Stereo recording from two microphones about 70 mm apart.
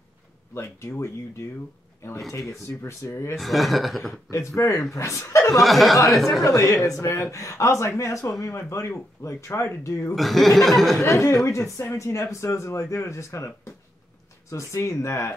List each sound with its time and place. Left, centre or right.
0.6 s speech: left
2.8 s speech: left
3.3 s chuckle: centre
4.6 s speech: left
5.6 s chuckle: centre
6.4 s speech: left
10.1 s chuckle: centre
11.1 s speech: left
14.5 s speech: left